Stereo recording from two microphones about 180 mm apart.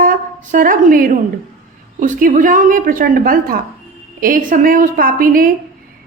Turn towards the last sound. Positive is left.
turn(degrees=-50)  # may be behind; listen again after turning